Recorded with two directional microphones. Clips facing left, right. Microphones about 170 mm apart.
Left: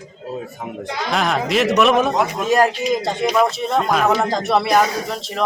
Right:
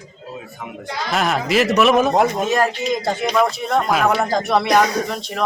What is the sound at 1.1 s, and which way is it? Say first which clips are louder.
Speech: even; centre (ahead or behind).